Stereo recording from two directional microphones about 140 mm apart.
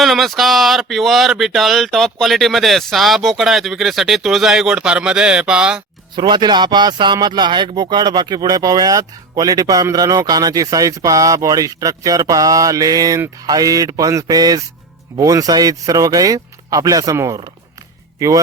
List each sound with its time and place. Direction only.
0.0 s speech: centre (ahead or behind)
6.1 s speech: 35° right (ahead or behind)